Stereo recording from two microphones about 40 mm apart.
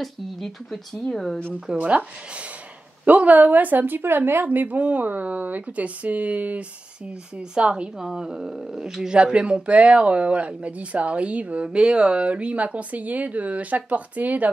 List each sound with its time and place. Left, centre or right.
0.0 s speech: centre
1.8 s a woman's voice: right
4.5 s speech: right
7.3 s a woman's voice: right
8.0 s speech: centre
9.1 s speech: right